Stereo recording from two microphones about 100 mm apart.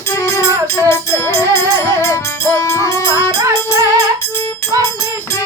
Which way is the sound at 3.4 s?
30° right (ahead or behind).